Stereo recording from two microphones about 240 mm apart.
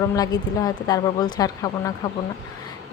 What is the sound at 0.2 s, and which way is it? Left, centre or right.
Speech, centre.